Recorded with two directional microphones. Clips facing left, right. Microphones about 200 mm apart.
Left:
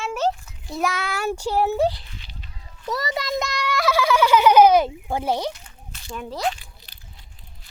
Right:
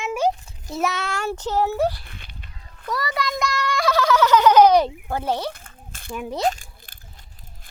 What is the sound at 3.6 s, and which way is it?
Fowl, 5° left (ahead or behind).